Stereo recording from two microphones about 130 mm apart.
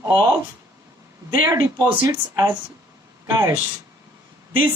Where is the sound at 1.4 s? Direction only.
20° right (ahead or behind).